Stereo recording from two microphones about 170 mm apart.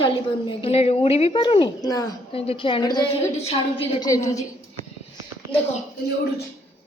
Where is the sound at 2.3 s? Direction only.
35° left (ahead or behind).